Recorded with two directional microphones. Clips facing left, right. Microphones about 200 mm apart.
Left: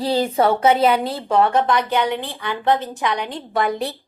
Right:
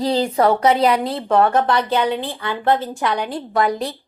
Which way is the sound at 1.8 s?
15° left (ahead or behind).